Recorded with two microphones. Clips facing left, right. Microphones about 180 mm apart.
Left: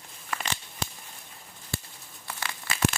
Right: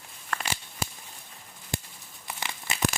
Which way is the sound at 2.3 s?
15° right (ahead or behind).